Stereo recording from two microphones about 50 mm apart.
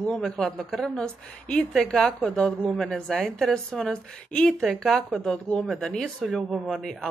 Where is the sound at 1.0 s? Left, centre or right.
Left.